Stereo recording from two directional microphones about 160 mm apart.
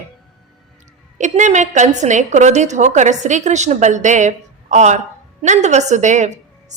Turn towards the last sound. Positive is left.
turn(degrees=-50)  # may be behind; listen again after turning